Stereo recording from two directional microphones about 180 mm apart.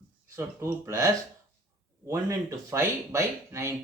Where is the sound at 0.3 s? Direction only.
15° right (ahead or behind).